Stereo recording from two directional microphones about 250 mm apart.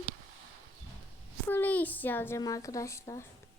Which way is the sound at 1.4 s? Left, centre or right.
Centre.